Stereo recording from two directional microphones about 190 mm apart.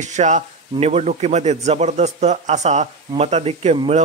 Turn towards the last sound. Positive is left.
turn(degrees=-35)  # may be behind; listen again after turning